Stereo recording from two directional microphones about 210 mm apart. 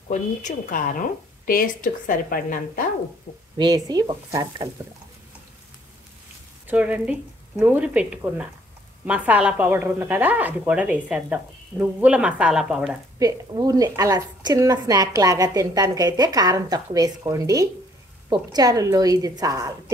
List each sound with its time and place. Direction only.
0.1 s a woman's voice: 35° left (ahead or behind)
3.5 s speech: 20° right (ahead or behind)
6.7 s a woman's voice: 5° right (ahead or behind)
13.2 s a woman's voice: 15° right (ahead or behind)